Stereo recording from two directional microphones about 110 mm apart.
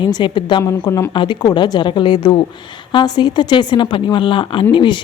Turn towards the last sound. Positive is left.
turn(degrees=45)  # may be behind; listen again after turning